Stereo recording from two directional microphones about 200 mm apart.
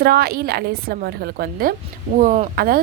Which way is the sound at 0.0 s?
50° right (ahead or behind).